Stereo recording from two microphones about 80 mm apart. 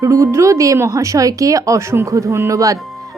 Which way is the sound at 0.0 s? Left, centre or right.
Right.